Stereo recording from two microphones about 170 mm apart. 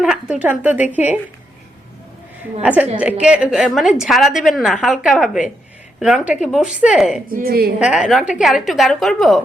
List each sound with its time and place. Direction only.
0.0 s a woman's voice: 5° right (ahead or behind)
2.6 s a woman's voice: 10° right (ahead or behind)
7.3 s a woman's voice: 60° right (ahead or behind)
7.8 s a woman's voice: 5° right (ahead or behind)